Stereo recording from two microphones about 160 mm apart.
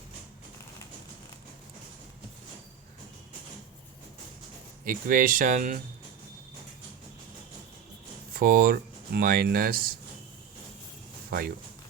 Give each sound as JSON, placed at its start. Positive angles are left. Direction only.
{"t": 4.9, "sound": "speech", "side_deg": -60}
{"t": 8.3, "sound": "speech", "side_deg": -65}
{"t": 11.3, "sound": "speech", "side_deg": -65}